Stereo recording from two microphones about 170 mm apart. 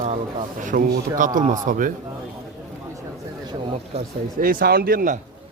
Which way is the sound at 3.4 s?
30° right (ahead or behind).